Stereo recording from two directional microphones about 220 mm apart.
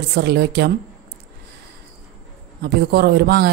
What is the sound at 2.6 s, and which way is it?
Speech, 45° right (ahead or behind).